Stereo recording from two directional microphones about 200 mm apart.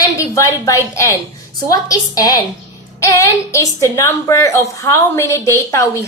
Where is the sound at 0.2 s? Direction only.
15° left (ahead or behind).